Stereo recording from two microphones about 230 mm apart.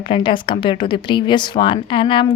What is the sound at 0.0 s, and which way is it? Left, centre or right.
Speech, left.